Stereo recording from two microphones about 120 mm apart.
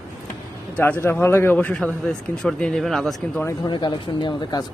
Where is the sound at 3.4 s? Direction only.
35° left (ahead or behind).